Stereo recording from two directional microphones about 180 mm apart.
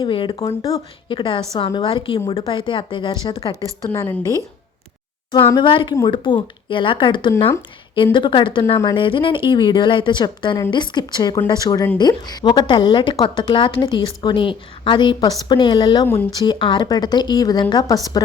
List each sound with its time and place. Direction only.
0.0 s a woman's voice: 25° left (ahead or behind)
3.8 s a woman's voice: 10° left (ahead or behind)
5.3 s a woman's voice: 25° left (ahead or behind)
16.0 s a woman's voice: 15° left (ahead or behind)